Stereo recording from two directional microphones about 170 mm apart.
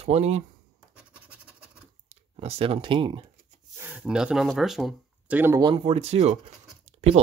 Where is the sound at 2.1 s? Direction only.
35° right (ahead or behind).